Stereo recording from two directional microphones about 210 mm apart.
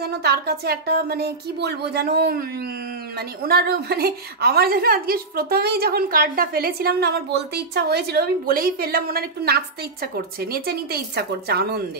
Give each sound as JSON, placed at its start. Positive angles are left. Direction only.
{"t": 0.0, "sound": "a woman's voice", "side_deg": -50}